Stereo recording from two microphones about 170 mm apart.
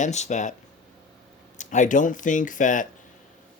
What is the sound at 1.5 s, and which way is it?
Speech, 45° left (ahead or behind).